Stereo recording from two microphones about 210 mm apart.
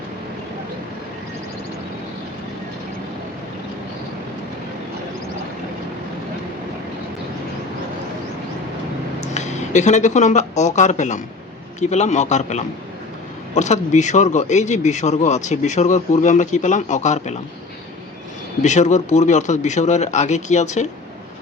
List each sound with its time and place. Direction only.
9.3 s a man's voice: 35° left (ahead or behind)
18.6 s a man's voice: 35° left (ahead or behind)